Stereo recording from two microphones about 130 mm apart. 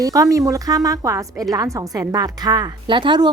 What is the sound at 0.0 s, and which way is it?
A woman's voice, 25° right (ahead or behind).